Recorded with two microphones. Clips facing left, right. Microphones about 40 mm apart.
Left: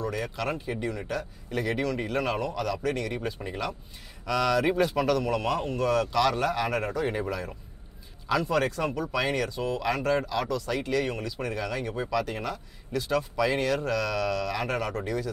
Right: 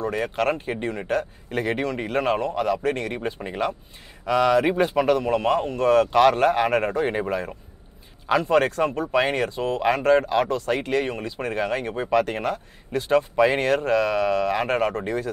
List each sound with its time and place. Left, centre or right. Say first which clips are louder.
0.0 s speech: right 7 dB; right